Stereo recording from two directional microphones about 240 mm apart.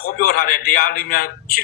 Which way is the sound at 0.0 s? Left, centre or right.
Left.